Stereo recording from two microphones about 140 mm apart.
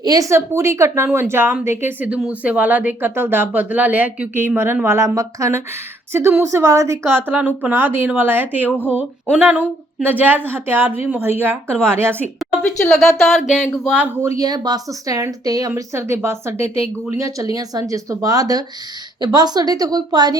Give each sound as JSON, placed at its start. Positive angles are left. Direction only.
{"t": 0.0, "sound": "speech", "side_deg": -25}
{"t": 12.6, "sound": "speech", "side_deg": 5}
{"t": 14.2, "sound": "speech", "side_deg": -25}